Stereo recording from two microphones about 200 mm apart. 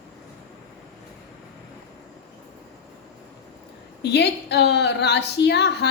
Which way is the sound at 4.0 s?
55° left (ahead or behind).